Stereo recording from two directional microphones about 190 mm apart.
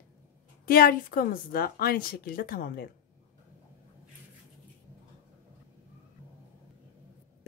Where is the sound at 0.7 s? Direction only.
50° left (ahead or behind).